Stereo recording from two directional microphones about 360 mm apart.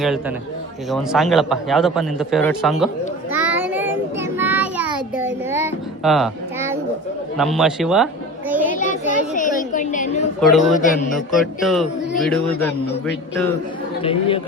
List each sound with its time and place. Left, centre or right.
0.0 s a man's voice: centre
3.3 s child singing: centre
7.3 s children playing: centre
8.7 s a sound: left
10.4 s a man's voice: centre